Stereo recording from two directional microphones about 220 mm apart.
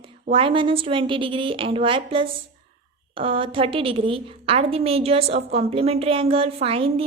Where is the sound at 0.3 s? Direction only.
25° right (ahead or behind).